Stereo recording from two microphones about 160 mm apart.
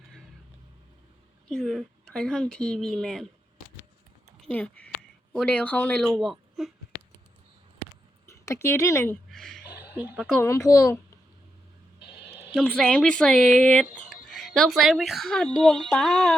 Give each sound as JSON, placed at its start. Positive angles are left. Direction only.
{"t": 1.5, "sound": "speech", "side_deg": 0}
{"t": 4.4, "sound": "a sound", "side_deg": 10}
{"t": 5.3, "sound": "speech", "side_deg": 5}
{"t": 8.3, "sound": "speech", "side_deg": 15}
{"t": 9.3, "sound": "a sound", "side_deg": 0}
{"t": 9.9, "sound": "speech", "side_deg": -10}
{"t": 10.4, "sound": "speech", "side_deg": 20}
{"t": 11.9, "sound": "a sound", "side_deg": 90}
{"t": 12.5, "sound": "speech", "side_deg": 5}